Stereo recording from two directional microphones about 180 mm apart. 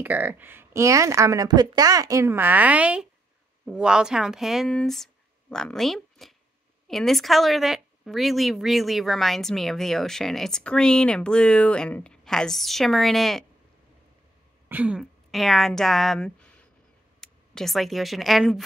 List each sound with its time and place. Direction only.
0.0 s a woman's voice: 10° right (ahead or behind)
14.7 s speech: 5° right (ahead or behind)